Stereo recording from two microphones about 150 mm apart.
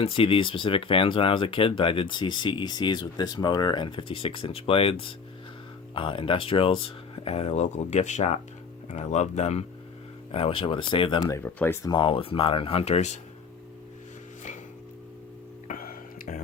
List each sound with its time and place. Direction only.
0.0 s speech: 35° left (ahead or behind)
11.2 s speech: 20° left (ahead or behind)
11.9 s speech: 35° left (ahead or behind)
15.6 s music: 70° left (ahead or behind)